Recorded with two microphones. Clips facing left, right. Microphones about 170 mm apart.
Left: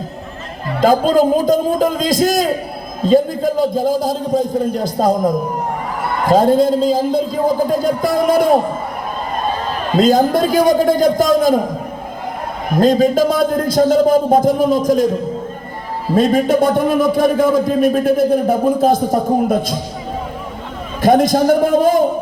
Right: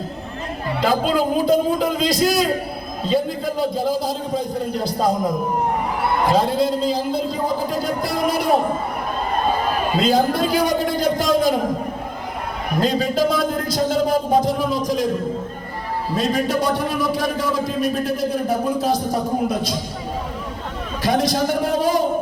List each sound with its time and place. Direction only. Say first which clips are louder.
0.8 s a man's voice: left 7 dB; 45° left (ahead or behind)
9.6 s a sound: left 1 dB; 10° right (ahead or behind)
10.0 s a man's voice: left 7 dB; 45° left (ahead or behind)
12.8 s a man's voice: left 7 dB; 45° left (ahead or behind)
16.1 s a man's voice: left 8 dB; 50° left (ahead or behind)
21.0 s a man's voice: left 8 dB; 50° left (ahead or behind)